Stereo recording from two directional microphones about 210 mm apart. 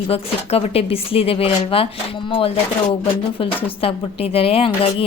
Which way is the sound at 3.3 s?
25° left (ahead or behind).